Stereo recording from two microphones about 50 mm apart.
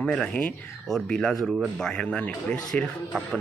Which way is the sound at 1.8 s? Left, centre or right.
Centre.